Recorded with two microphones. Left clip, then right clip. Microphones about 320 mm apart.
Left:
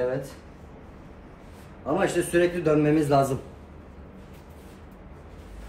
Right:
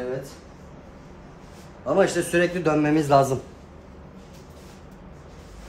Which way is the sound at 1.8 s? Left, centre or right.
Centre.